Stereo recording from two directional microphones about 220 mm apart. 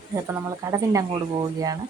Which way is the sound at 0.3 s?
15° right (ahead or behind).